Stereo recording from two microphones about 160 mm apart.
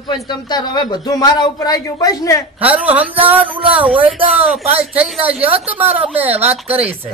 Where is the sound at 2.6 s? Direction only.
10° right (ahead or behind).